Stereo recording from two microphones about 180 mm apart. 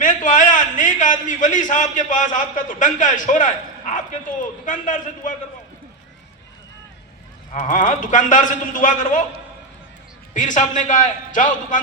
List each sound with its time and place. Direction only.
0.0 s a sound: 45° left (ahead or behind)
7.5 s a man's voice: 45° left (ahead or behind)
10.3 s a man's voice: 45° left (ahead or behind)